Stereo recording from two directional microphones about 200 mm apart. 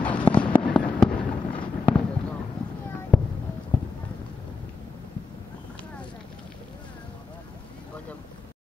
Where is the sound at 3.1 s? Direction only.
5° left (ahead or behind).